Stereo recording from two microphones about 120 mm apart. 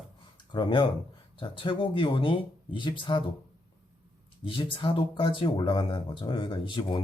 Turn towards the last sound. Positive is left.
turn(degrees=45)  # may be behind; listen again after turning